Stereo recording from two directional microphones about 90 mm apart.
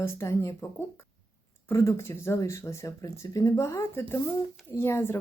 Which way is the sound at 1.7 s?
30° left (ahead or behind).